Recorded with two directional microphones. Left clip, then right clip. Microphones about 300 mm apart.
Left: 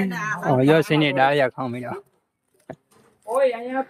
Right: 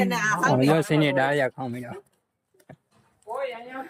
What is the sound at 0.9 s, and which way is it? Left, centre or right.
Speech, centre.